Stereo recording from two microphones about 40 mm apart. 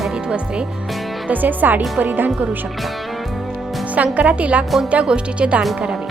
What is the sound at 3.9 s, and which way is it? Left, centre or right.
Speech, right.